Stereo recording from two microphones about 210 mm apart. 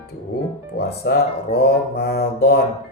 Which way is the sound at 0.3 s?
55° left (ahead or behind).